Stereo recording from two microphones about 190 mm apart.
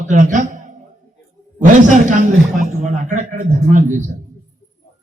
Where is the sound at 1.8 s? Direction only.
40° right (ahead or behind).